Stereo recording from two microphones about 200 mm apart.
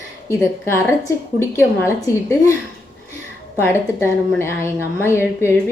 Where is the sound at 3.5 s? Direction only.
10° left (ahead or behind).